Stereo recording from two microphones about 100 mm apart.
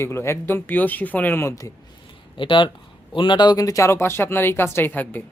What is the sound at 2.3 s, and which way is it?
Speech, 55° left (ahead or behind).